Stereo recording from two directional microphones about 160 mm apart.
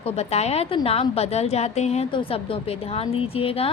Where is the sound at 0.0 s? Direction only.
40° left (ahead or behind).